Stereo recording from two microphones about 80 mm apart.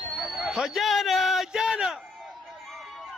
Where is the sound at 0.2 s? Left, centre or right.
Centre.